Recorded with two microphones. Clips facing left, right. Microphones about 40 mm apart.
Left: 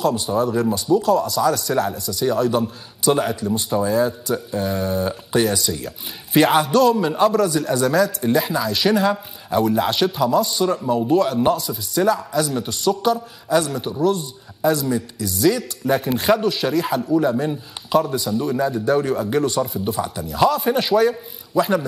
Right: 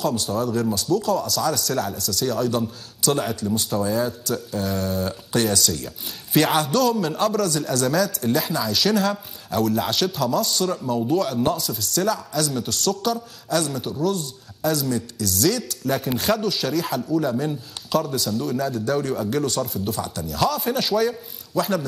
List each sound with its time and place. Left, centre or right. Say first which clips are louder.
0.0 s a man's voice: left 4 dB; centre